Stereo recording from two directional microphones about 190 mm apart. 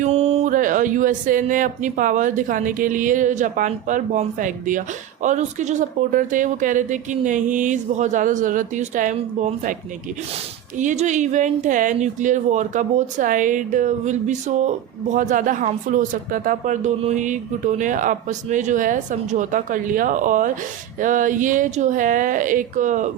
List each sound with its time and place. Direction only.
0.0 s speech: 35° right (ahead or behind)